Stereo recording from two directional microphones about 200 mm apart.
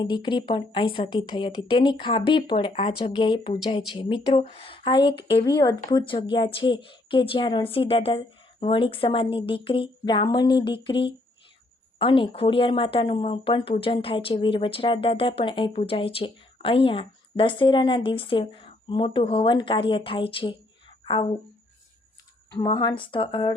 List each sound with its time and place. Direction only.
0.0 s speech: 25° left (ahead or behind)
22.5 s speech: 25° left (ahead or behind)